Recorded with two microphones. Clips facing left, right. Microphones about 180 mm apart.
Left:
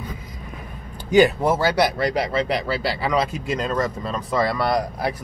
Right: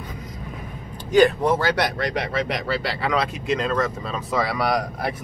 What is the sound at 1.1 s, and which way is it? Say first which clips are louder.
Speech: even; 5° left (ahead or behind).